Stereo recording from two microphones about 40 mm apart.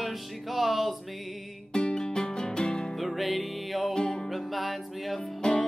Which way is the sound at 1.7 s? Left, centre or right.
Left.